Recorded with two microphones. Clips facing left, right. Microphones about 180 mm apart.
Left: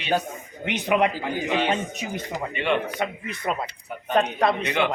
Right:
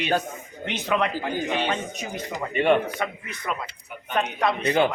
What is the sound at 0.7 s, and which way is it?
Speech, 20° left (ahead or behind).